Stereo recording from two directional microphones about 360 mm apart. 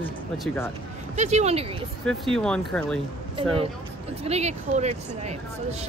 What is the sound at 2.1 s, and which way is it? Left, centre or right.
Speech, centre.